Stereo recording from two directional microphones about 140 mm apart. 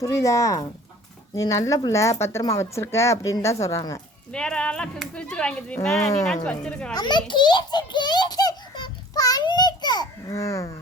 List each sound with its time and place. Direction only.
0.0 s speech: 20° left (ahead or behind)
4.3 s speech: 5° left (ahead or behind)
6.9 s a sound: 30° left (ahead or behind)